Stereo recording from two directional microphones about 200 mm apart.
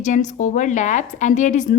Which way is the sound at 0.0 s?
40° left (ahead or behind).